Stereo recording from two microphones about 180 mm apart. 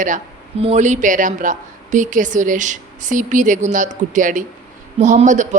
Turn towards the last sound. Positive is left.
turn(degrees=-45)  # may be behind; listen again after turning